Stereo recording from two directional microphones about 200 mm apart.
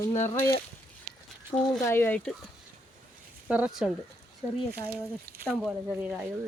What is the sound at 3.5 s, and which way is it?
Speech, 5° right (ahead or behind).